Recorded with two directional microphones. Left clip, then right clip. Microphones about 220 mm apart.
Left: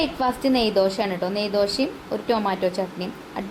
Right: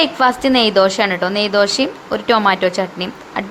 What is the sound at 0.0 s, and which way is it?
Speech, 10° right (ahead or behind).